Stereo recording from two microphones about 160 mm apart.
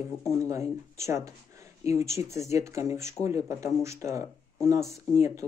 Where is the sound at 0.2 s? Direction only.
20° right (ahead or behind).